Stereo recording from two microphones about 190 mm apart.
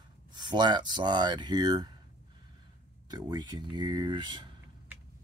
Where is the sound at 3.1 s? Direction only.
20° right (ahead or behind).